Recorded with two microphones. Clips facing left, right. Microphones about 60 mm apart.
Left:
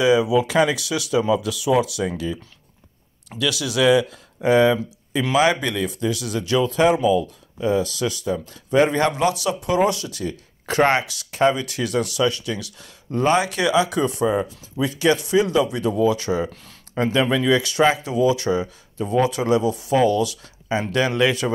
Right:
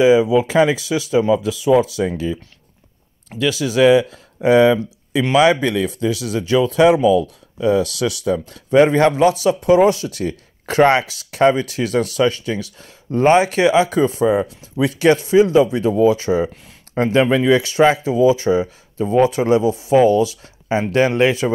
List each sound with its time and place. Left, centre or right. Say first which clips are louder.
0.0 s speech: right 4 dB; right
6.6 s speech: right 5 dB; right
8.7 s speech: right 5 dB; right